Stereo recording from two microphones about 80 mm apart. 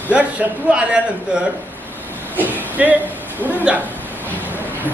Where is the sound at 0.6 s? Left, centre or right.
Centre.